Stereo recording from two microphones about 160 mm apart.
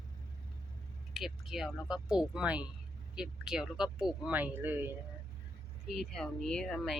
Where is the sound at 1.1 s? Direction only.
Centre (ahead or behind).